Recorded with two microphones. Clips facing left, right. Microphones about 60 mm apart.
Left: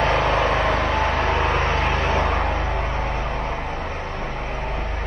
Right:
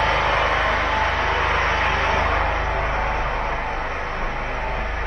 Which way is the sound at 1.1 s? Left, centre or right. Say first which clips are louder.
Even; left.